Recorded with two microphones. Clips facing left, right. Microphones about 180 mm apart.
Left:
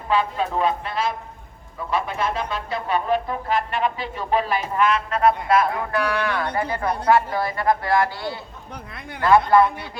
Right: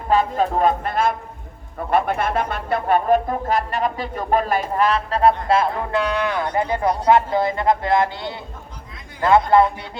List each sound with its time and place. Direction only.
0.1 s a man's voice: 45° right (ahead or behind); by 9.6 s 20° right (ahead or behind)